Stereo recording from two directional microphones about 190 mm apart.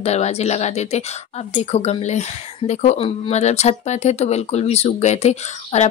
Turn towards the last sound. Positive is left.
turn(degrees=35)  # may be behind; listen again after turning